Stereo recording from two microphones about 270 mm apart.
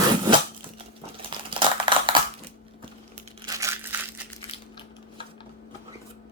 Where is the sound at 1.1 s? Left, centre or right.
Centre.